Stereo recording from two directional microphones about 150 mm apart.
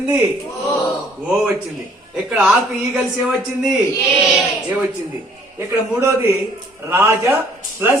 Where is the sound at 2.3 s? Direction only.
5° right (ahead or behind).